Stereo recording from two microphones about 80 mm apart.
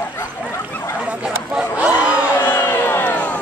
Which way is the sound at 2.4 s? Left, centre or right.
Left.